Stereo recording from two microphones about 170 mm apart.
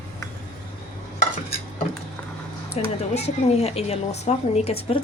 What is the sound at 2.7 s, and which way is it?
Speech, 40° left (ahead or behind).